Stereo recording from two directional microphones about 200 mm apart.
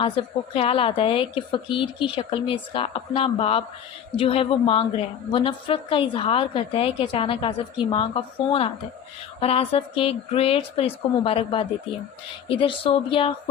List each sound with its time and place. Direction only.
0.0 s a woman's voice: 25° left (ahead or behind)